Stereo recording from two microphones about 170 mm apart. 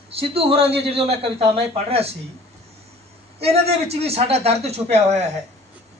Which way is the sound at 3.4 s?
35° right (ahead or behind).